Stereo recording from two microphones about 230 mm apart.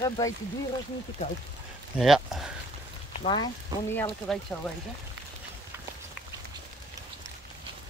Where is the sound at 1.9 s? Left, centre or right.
Centre.